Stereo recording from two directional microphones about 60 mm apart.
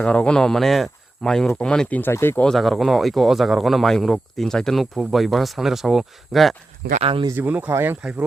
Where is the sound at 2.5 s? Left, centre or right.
Centre.